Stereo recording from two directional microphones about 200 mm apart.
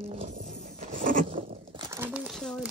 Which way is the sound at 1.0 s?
40° right (ahead or behind).